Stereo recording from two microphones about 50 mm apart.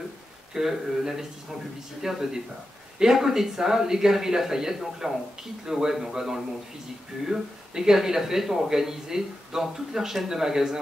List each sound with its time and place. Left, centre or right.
0.6 s speech: centre